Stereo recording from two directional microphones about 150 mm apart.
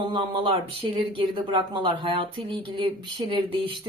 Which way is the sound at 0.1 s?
35° right (ahead or behind).